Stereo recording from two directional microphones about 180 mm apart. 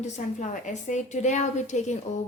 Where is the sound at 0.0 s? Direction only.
40° left (ahead or behind).